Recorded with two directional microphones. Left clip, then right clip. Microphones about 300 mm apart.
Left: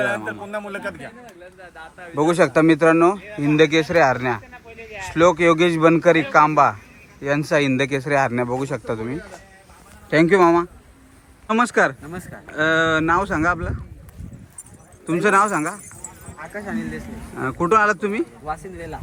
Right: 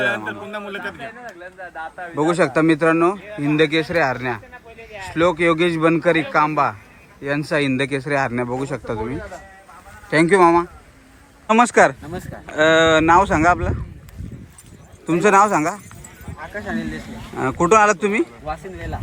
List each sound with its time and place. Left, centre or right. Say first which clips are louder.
0.3 s a man's voice: even; left
1.7 s speech: right 10 dB; right
2.1 s speech: left 1 dB; centre
3.2 s speech: right 1 dB; right
3.4 s speech: left 1 dB; centre
4.5 s a sound: even; right
5.1 s speech: left 2 dB; centre
15.0 s speech: right 3 dB; centre
17.3 s speech: right 3 dB; centre